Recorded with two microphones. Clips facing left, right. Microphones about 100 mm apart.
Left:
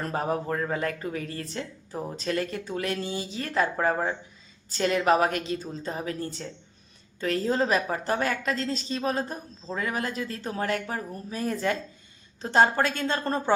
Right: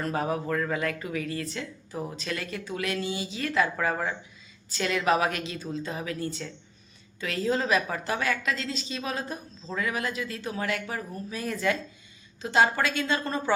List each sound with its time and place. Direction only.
0.0 s speech: 35° left (ahead or behind)
12.4 s a woman's voice: 45° left (ahead or behind)